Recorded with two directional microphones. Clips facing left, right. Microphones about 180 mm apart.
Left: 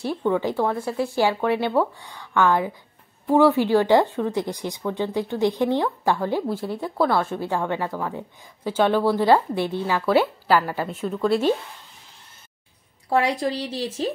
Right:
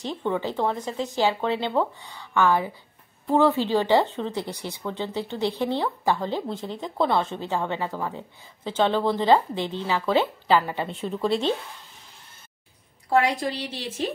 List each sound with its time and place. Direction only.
0.0 s speech: 10° left (ahead or behind)
3.3 s speech: 10° left (ahead or behind)
7.0 s a woman's voice: 20° right (ahead or behind)
8.6 s speech: 10° left (ahead or behind)
13.1 s a woman's voice: 35° left (ahead or behind)